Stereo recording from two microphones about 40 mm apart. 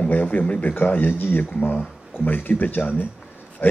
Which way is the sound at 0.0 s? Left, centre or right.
Left.